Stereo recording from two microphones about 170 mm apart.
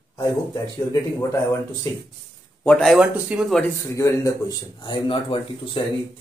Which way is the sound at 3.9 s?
20° left (ahead or behind).